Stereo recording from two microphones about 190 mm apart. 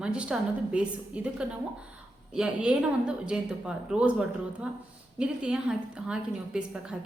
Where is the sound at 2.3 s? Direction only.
5° right (ahead or behind).